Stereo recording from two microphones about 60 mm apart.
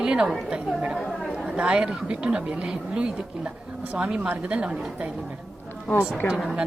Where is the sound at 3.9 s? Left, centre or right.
Right.